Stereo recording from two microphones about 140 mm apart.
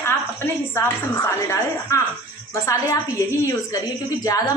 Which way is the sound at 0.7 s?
20° left (ahead or behind).